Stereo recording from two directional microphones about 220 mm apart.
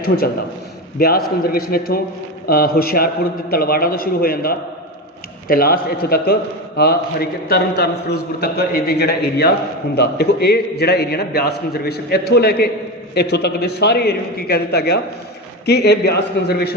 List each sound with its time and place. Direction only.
0.9 s a man's voice: 45° left (ahead or behind)